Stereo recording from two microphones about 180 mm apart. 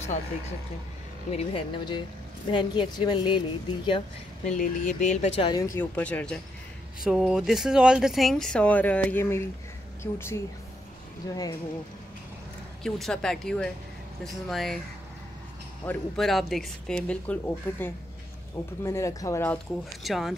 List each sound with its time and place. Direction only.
1.3 s a woman's voice: 35° left (ahead or behind)
4.6 s speech: 45° left (ahead or behind)
5.6 s a woman's voice: 15° left (ahead or behind)
12.8 s speech: 5° left (ahead or behind)
15.8 s speech: 5° left (ahead or behind)
20.0 s speech: centre (ahead or behind)